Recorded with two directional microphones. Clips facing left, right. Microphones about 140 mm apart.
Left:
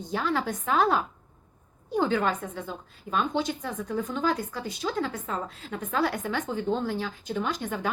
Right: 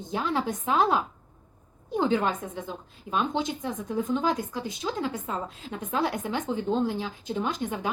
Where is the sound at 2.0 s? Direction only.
20° right (ahead or behind).